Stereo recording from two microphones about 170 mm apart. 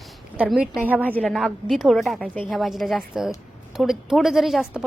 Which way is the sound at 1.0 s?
10° left (ahead or behind).